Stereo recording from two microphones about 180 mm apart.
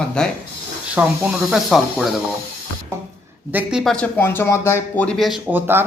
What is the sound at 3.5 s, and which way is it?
Speech, 5° right (ahead or behind).